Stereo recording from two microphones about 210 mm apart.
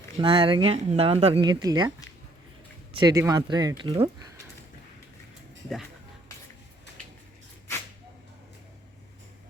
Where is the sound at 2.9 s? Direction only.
15° right (ahead or behind).